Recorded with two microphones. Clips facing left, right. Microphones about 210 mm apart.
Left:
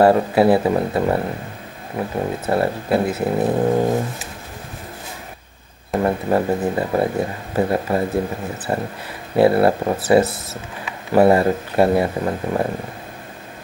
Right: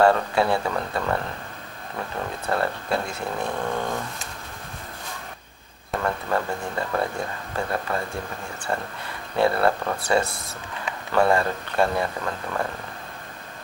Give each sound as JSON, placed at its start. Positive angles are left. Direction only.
{"t": 0.1, "sound": "speech", "side_deg": 20}
{"t": 3.3, "sound": "speech", "side_deg": 35}
{"t": 5.9, "sound": "speech", "side_deg": 25}
{"t": 9.5, "sound": "speech", "side_deg": 25}
{"t": 10.2, "sound": "speech", "side_deg": 5}
{"t": 11.1, "sound": "speech", "side_deg": 20}